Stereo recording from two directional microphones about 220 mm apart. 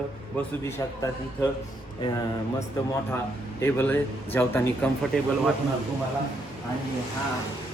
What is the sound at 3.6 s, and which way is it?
A man's voice, 10° left (ahead or behind).